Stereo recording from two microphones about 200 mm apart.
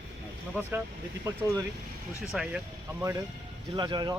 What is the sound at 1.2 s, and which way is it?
Speech, 15° right (ahead or behind).